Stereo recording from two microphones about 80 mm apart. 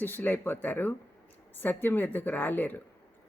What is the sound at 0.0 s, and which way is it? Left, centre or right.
Speech, left.